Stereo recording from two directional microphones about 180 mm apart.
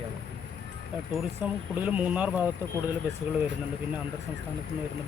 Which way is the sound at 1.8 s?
10° right (ahead or behind).